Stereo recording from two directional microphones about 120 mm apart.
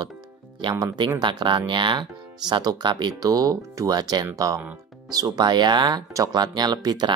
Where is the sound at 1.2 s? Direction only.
40° right (ahead or behind).